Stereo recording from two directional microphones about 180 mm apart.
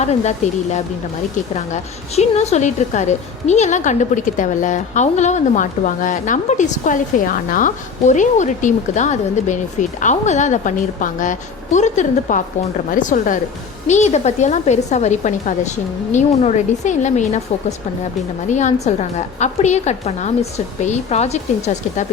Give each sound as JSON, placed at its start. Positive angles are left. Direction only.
{"t": 0.0, "sound": "a woman's voice", "side_deg": 40}